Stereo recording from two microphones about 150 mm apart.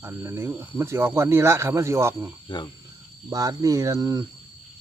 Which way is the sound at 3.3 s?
25° right (ahead or behind).